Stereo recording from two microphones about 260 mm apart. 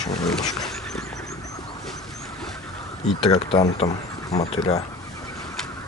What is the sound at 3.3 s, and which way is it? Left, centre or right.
Speech, centre.